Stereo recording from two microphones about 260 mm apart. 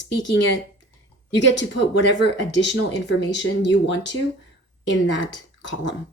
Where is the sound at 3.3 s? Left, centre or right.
Left.